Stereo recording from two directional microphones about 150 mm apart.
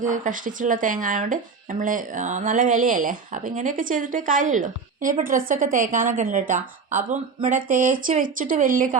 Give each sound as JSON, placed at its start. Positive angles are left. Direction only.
{"t": 0.0, "sound": "speech", "side_deg": -60}